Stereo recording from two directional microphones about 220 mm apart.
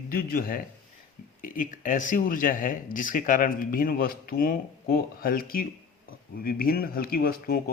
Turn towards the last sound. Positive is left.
turn(degrees=45)  # may be behind; listen again after turning